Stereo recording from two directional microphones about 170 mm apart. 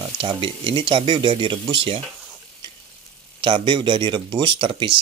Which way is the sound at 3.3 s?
30° right (ahead or behind).